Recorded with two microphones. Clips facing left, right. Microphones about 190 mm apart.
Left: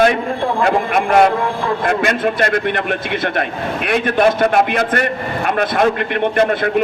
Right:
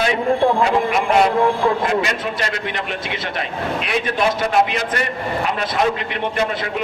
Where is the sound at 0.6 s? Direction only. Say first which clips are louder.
Left 2 dB; 55° left (ahead or behind).